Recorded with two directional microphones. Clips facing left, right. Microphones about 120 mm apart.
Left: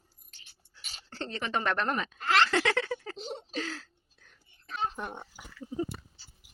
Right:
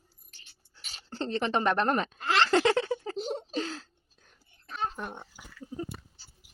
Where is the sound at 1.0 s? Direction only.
30° right (ahead or behind).